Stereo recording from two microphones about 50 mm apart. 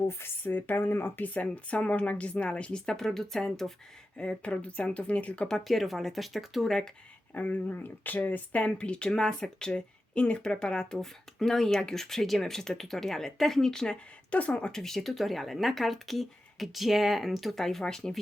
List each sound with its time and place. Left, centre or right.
0.1 s speech: left
1.2 s speech: left; by 3.7 s centre
4.2 s speech: left
5.5 s speech: centre
7.3 s speech: left
8.5 s speech: left
14.3 s speech: left
14.8 s speech: centre